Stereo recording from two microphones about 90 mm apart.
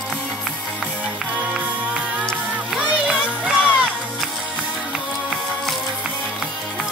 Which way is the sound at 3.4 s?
10° right (ahead or behind).